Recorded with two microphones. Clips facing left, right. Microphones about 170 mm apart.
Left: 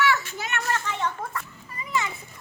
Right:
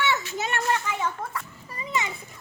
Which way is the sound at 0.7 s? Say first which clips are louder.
Right 1 dB; 5° right (ahead or behind).